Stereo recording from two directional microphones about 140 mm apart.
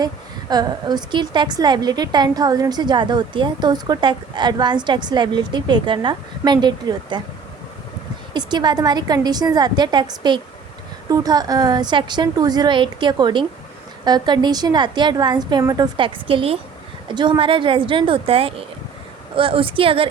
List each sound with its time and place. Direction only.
0.5 s a woman's voice: 30° right (ahead or behind)
8.3 s a woman's voice: 30° right (ahead or behind)